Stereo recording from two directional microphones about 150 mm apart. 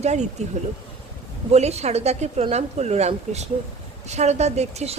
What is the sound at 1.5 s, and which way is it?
A woman's voice, 45° right (ahead or behind).